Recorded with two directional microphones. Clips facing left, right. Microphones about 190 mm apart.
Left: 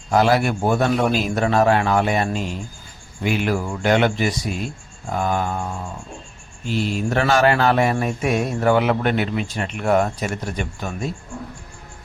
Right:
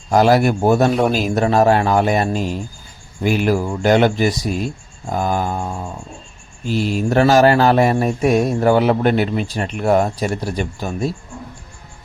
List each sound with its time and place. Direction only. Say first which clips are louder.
0.1 s speech: right 4 dB; 40° right (ahead or behind)
6.7 s speech: right 4 dB; 40° right (ahead or behind)